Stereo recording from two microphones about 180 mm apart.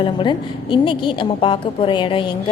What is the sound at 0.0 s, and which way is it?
A woman's voice, 25° left (ahead or behind).